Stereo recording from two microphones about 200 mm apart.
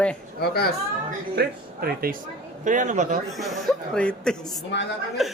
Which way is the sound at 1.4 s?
50° right (ahead or behind).